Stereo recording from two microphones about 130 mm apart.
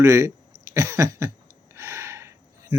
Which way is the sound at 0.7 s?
25° right (ahead or behind).